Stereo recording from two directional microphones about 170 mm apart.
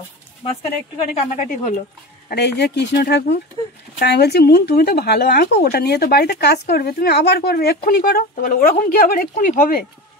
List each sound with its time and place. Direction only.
1.3 s speech: 50° left (ahead or behind)
2.2 s speech: 75° left (ahead or behind); by 9.8 s 55° left (ahead or behind)